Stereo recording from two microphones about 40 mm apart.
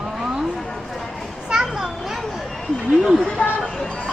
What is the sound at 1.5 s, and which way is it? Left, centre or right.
Children playing, centre.